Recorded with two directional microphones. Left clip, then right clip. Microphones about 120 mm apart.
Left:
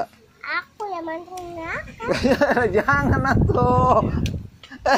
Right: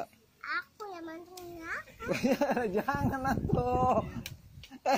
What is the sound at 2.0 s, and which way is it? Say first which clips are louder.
Speech: left 11 dB; 85° right.